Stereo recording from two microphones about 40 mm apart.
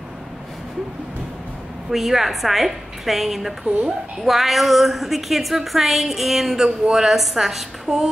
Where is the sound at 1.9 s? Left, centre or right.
Centre.